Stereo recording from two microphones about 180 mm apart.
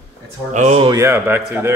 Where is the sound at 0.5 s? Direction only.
40° right (ahead or behind).